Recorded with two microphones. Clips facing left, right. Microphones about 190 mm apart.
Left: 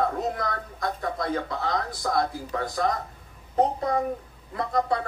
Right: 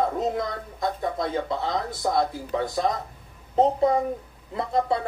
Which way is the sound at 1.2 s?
25° right (ahead or behind).